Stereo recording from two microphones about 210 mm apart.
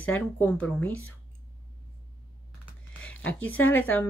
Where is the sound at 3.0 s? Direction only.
5° left (ahead or behind).